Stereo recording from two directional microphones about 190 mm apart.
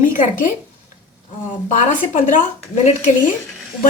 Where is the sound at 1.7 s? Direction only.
40° left (ahead or behind).